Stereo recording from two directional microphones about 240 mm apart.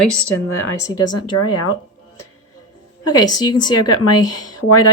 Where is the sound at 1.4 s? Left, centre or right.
Left.